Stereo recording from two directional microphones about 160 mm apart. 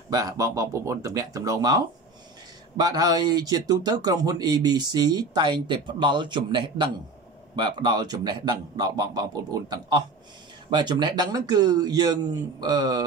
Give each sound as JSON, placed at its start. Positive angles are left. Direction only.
{"t": 0.1, "sound": "speech", "side_deg": -20}